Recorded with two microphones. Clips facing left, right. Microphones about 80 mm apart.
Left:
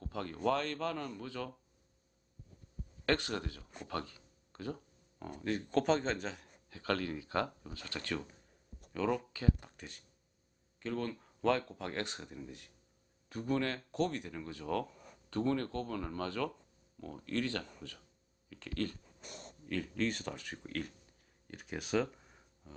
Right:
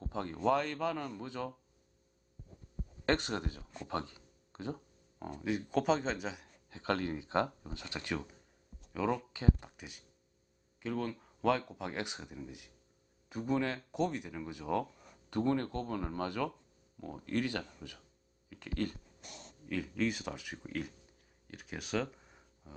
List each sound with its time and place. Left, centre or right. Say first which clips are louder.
0.0 s speech: right 2 dB; right
3.1 s speech: right 1 dB; right
5.4 s speech: even; centre
6.4 s speech: right 2 dB; right
9.3 s speech: right 2 dB; right
9.7 s speech: even; centre
19.2 s a sound: left 3 dB; left
19.6 s speech: right 1 dB; centre
21.4 s clicking: left 2 dB; centre